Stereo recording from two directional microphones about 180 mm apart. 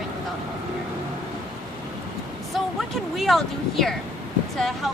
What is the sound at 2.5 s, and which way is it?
Speech, centre (ahead or behind).